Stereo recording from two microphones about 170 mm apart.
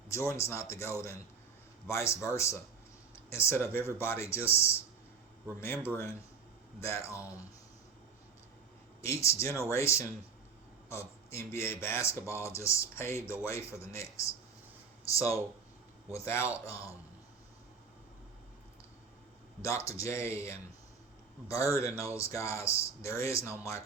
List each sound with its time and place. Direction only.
0.1 s speech: 15° left (ahead or behind)
5.5 s speech: 15° left (ahead or behind)
9.0 s speech: 15° left (ahead or behind)
19.6 s speech: 15° left (ahead or behind)